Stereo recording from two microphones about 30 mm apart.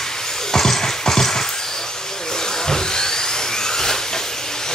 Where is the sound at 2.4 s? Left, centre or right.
Centre.